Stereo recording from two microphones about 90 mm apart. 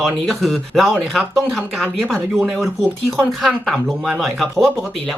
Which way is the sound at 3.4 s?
5° right (ahead or behind).